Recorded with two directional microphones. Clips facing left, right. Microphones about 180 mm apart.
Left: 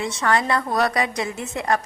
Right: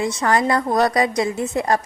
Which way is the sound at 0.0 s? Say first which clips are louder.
Right 3 dB; 35° right (ahead or behind).